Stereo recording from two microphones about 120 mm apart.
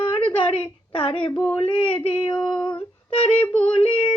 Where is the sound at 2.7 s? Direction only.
50° left (ahead or behind).